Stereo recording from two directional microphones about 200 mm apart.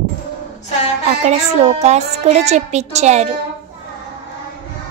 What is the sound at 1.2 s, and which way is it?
Speech, 35° right (ahead or behind).